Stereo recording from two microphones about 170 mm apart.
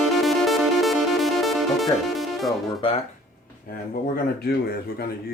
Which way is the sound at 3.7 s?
60° left (ahead or behind).